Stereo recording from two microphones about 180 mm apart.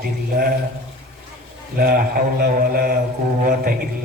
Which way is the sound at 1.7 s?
55° right (ahead or behind).